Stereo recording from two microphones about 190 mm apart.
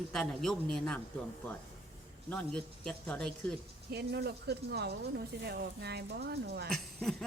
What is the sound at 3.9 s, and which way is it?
Speech, 60° right (ahead or behind).